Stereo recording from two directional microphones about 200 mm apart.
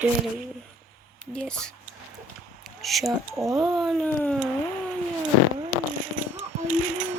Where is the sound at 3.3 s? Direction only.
15° right (ahead or behind).